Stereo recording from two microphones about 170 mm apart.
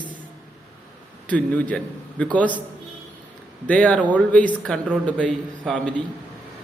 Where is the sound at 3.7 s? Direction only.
5° left (ahead or behind).